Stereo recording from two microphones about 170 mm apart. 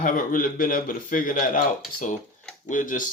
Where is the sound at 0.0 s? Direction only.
50° left (ahead or behind).